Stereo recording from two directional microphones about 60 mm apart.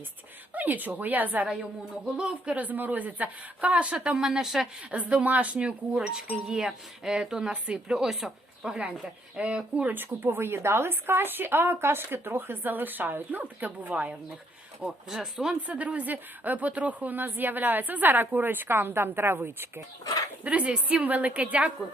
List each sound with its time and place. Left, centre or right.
0.5 s speech: right
1.5 s speech: centre
4.9 s a woman's voice: right
9.9 s a woman's voice: right
15.1 s a woman's voice: centre
15.6 s a woman's voice: right
20.4 s speech: right